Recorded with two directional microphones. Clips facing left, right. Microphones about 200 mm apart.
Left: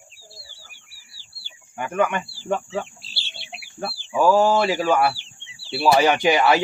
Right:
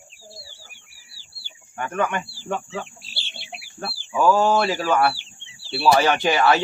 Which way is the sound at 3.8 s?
10° left (ahead or behind).